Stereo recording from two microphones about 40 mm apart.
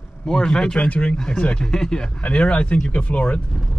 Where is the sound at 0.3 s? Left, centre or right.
Centre.